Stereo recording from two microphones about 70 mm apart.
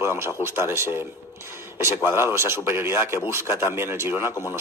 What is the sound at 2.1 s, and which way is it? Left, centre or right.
Speech, right.